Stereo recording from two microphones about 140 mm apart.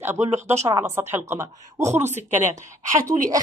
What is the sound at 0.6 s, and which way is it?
A woman's voice, 20° right (ahead or behind).